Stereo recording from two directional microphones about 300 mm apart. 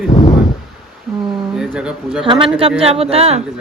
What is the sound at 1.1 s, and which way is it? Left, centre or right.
A man's voice, centre.